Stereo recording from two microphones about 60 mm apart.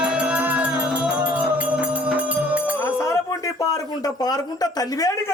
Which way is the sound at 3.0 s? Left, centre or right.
Left.